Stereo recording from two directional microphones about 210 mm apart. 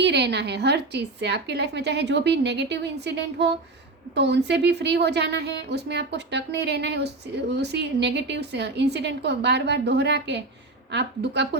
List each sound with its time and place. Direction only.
0.0 s a woman's voice: 55° right (ahead or behind)